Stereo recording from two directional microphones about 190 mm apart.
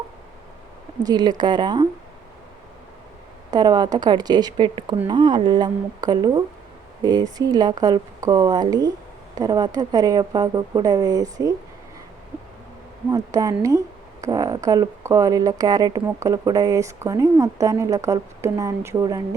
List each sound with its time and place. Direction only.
1.0 s speech: 20° right (ahead or behind)
3.5 s speech: 20° right (ahead or behind)
13.1 s speech: 20° right (ahead or behind)